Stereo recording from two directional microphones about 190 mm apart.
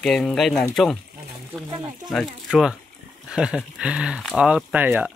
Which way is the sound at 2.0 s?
Centre (ahead or behind).